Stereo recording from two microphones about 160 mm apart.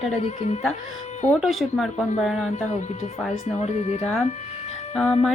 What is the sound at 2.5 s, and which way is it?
Speech, 45° left (ahead or behind).